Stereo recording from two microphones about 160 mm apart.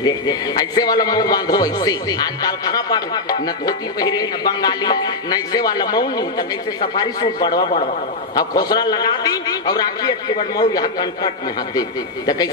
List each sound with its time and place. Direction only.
0.0 s a man's voice: 25° left (ahead or behind)